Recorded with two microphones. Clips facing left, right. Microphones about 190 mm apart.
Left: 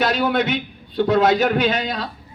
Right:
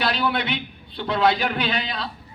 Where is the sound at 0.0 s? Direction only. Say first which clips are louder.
Left 5 dB; 45° left (ahead or behind).